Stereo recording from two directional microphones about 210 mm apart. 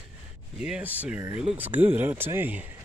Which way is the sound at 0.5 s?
5° right (ahead or behind).